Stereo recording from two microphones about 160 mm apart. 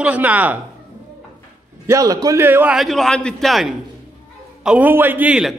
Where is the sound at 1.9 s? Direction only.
20° right (ahead or behind); by 3.7 s centre (ahead or behind).